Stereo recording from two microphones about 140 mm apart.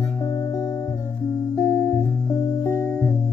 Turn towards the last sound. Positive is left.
turn(degrees=15)  # may be behind; listen again after turning